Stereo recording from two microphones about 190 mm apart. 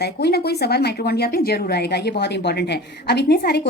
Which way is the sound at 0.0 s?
55° left (ahead or behind).